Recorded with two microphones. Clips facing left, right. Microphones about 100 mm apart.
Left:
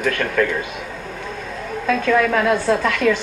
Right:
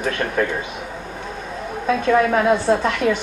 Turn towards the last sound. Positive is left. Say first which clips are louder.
# even
turn(degrees=-25)  # may be behind; listen again after turning